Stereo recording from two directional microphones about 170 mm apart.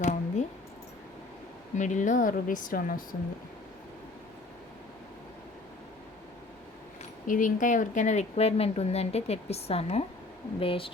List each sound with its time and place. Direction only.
0.0 s a sound: 45° left (ahead or behind)
1.7 s speech: 45° left (ahead or behind)
7.3 s speech: 50° left (ahead or behind); by 10.9 s 30° left (ahead or behind)